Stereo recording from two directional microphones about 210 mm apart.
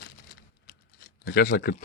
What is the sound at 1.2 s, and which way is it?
Speech, 50° left (ahead or behind).